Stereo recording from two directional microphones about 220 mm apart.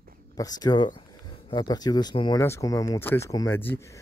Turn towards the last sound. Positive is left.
turn(degrees=10)  # may be behind; listen again after turning